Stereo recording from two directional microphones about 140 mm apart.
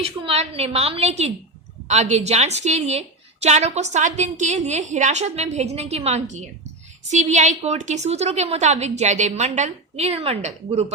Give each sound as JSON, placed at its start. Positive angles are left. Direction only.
{"t": 0.0, "sound": "a woman's voice", "side_deg": -45}